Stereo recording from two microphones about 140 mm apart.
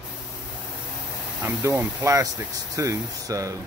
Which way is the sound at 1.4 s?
20° right (ahead or behind).